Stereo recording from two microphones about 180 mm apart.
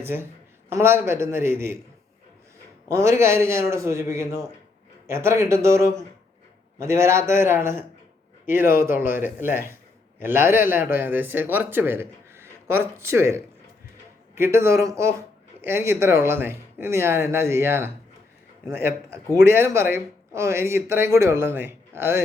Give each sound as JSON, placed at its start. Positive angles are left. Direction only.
{"t": 0.0, "sound": "a man's voice", "side_deg": -15}
{"t": 2.9, "sound": "a man's voice", "side_deg": -15}